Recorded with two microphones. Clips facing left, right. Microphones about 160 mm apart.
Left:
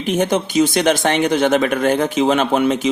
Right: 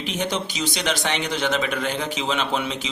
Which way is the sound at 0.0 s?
50° left (ahead or behind).